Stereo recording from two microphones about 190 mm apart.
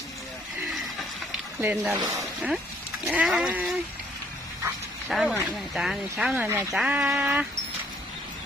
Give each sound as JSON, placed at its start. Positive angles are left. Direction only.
{"t": 0.7, "sound": "a sound", "side_deg": 0}
{"t": 2.0, "sound": "speech", "side_deg": -15}
{"t": 3.1, "sound": "speech", "side_deg": -5}
{"t": 5.0, "sound": "speech", "side_deg": 0}